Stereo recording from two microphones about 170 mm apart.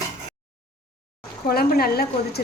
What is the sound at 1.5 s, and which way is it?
Speech, 65° left (ahead or behind).